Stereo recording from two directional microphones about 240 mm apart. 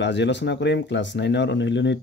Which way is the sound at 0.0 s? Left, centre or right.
Left.